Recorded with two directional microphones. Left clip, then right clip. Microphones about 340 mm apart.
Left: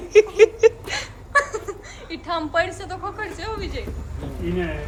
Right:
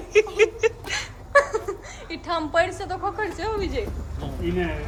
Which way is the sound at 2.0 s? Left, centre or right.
Centre.